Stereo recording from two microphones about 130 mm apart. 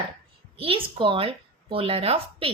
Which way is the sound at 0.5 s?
45° right (ahead or behind).